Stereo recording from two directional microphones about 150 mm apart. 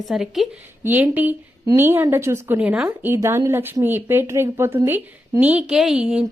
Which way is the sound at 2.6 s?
5° right (ahead or behind).